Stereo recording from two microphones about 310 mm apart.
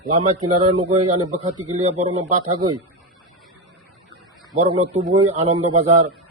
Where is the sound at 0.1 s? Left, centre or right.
Right.